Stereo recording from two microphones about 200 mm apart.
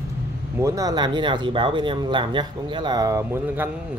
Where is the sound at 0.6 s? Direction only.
15° right (ahead or behind).